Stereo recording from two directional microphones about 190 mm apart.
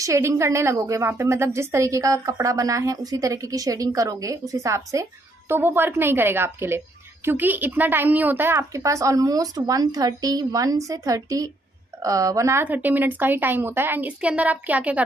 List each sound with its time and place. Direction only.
0.0 s a woman's voice: 15° right (ahead or behind)